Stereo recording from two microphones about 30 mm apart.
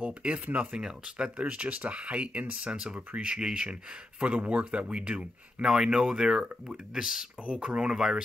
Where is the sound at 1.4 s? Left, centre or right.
Right.